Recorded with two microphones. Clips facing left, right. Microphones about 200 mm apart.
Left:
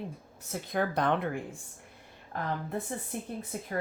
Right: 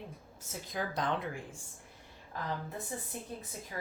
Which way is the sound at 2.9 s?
65° left (ahead or behind).